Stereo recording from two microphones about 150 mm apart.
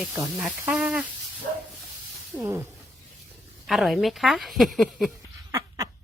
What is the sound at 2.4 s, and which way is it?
Speech, 15° right (ahead or behind).